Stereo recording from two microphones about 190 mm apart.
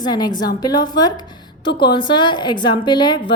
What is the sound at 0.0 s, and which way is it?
A woman's voice, 20° left (ahead or behind).